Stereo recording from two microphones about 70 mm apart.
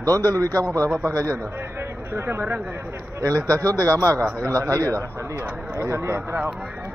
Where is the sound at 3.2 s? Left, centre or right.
Right.